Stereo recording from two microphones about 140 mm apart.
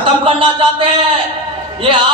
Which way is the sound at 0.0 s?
40° right (ahead or behind).